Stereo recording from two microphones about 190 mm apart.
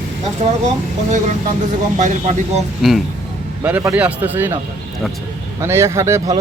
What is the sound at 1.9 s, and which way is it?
Speech, 35° right (ahead or behind).